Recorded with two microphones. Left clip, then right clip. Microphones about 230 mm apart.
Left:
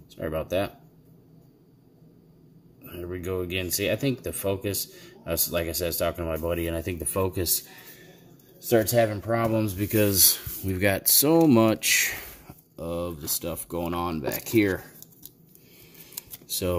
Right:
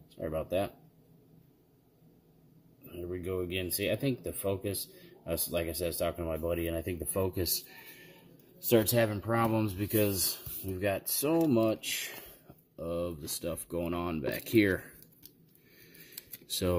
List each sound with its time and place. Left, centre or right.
0.2 s speech: centre
2.8 s speech: centre
8.7 s speech: centre
10.7 s speech: left
12.7 s speech: centre
16.4 s speech: centre